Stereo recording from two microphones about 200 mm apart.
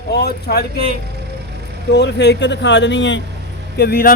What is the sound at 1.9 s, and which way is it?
Speech, 55° left (ahead or behind).